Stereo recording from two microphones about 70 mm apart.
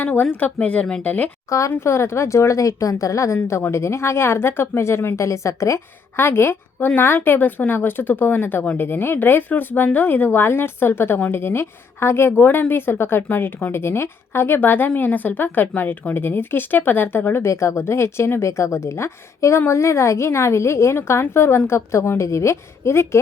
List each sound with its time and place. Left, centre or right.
0.0 s a woman's voice: left
1.5 s a woman's voice: left
17.5 s speech: left
22.2 s speech: left